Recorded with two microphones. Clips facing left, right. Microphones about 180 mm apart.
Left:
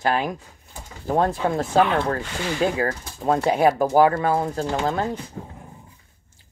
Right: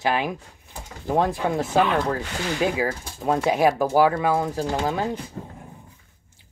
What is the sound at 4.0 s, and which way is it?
Speech, 10° right (ahead or behind).